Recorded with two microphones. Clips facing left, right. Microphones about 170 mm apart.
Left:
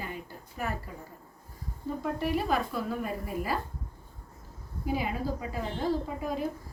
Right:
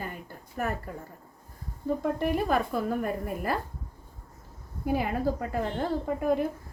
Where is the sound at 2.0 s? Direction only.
50° right (ahead or behind).